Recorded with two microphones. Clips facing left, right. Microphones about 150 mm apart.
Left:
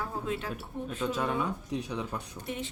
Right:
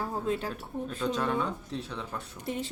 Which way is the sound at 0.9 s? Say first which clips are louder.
Right 1 dB; 5° left (ahead or behind).